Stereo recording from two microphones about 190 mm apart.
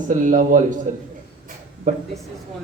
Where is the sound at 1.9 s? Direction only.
45° right (ahead or behind).